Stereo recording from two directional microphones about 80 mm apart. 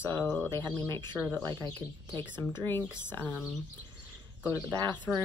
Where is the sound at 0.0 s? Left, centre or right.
Left.